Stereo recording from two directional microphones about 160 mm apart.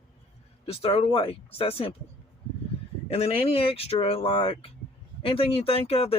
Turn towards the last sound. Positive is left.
turn(degrees=40)  # may be behind; listen again after turning